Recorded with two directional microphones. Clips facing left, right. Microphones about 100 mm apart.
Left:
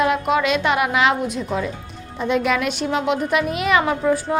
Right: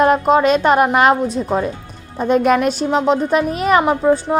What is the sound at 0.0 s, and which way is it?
A woman's voice, 40° right (ahead or behind).